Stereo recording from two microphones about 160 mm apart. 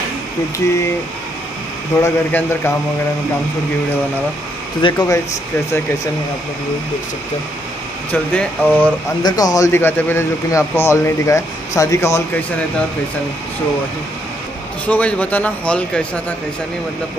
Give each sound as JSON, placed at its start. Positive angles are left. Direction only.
{"t": 2.0, "sound": "a man's voice", "side_deg": 15}
{"t": 4.8, "sound": "speech", "side_deg": 20}
{"t": 8.1, "sound": "a man's voice", "side_deg": 10}
{"t": 9.2, "sound": "a man's voice", "side_deg": 20}
{"t": 14.9, "sound": "a man's voice", "side_deg": 10}